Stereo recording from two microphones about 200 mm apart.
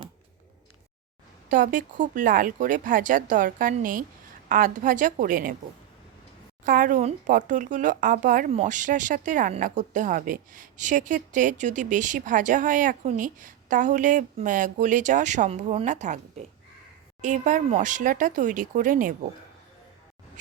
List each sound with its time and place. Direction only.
1.5 s a woman's voice: 40° right (ahead or behind)
6.7 s speech: 40° right (ahead or behind)